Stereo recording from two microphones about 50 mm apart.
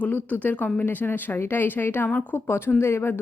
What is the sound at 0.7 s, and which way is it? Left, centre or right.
A woman's voice, left.